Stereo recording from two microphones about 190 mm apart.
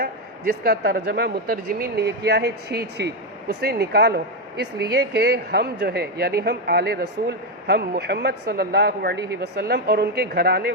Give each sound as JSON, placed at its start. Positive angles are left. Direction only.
{"t": 0.0, "sound": "speech", "side_deg": -55}